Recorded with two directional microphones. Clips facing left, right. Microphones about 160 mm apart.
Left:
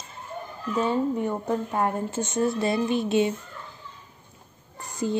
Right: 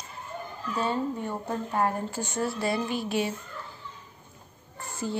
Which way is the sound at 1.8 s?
20° left (ahead or behind).